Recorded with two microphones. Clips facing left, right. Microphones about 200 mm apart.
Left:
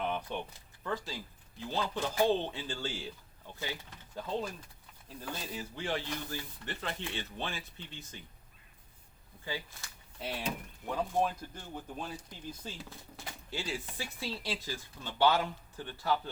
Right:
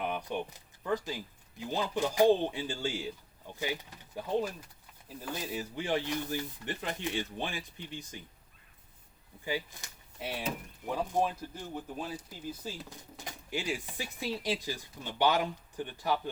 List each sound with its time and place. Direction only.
0.0 s a sound: 15° right (ahead or behind)
0.9 s speech: 15° right (ahead or behind)
9.4 s speech: 15° right (ahead or behind)